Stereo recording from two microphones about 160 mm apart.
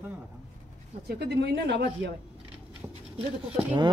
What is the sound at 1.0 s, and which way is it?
Speech, 90° right.